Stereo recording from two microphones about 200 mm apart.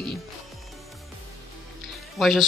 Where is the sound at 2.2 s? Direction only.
Centre (ahead or behind).